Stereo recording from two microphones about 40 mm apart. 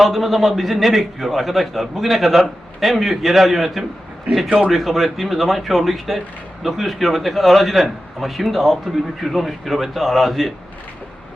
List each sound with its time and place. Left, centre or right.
0.0 s speech: centre
4.4 s speech: right
4.7 s speech: centre